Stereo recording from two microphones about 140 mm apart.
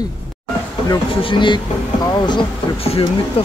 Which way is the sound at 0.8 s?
35° left (ahead or behind).